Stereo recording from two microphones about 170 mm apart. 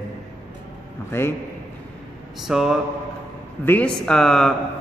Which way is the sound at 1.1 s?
15° left (ahead or behind).